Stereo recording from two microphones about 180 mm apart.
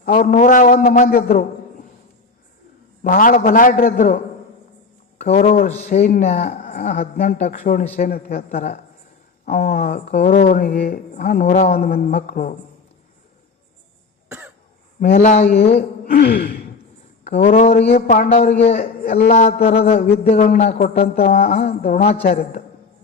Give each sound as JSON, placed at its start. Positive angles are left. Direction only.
{"t": 0.0, "sound": "speech", "side_deg": 50}
{"t": 1.0, "sound": "speech", "side_deg": 55}
{"t": 3.0, "sound": "speech", "side_deg": 50}
{"t": 8.4, "sound": "a man's voice", "side_deg": 40}
{"t": 9.5, "sound": "speech", "side_deg": 55}
{"t": 9.8, "sound": "speech", "side_deg": 40}
{"t": 14.3, "sound": "cough", "side_deg": -15}
{"t": 15.0, "sound": "speech", "side_deg": 50}
{"t": 15.8, "sound": "speech", "side_deg": 55}
{"t": 19.3, "sound": "a man's voice", "side_deg": 45}
{"t": 21.0, "sound": "speech", "side_deg": 55}
{"t": 21.5, "sound": "a man's voice", "side_deg": 35}
{"t": 21.8, "sound": "speech", "side_deg": 55}
{"t": 22.0, "sound": "a man's voice", "side_deg": 35}